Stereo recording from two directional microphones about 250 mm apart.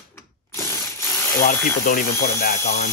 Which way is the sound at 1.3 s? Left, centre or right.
Left.